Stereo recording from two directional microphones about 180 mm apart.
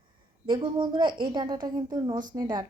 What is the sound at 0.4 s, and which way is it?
A woman's voice, 25° right (ahead or behind).